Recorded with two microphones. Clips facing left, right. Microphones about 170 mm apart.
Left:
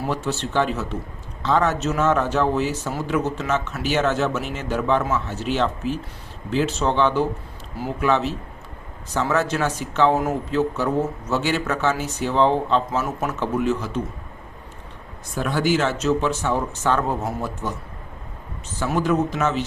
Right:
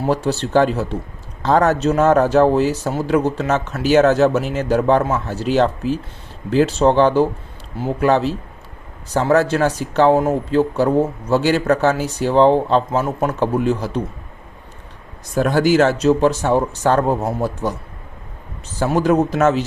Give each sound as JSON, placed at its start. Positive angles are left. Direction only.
{"t": 0.1, "sound": "speech", "side_deg": -35}
{"t": 15.4, "sound": "speech", "side_deg": -40}
{"t": 18.8, "sound": "speech", "side_deg": -35}